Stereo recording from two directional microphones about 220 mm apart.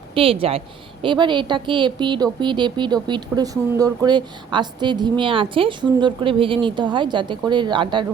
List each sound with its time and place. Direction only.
0.1 s speech: 25° right (ahead or behind)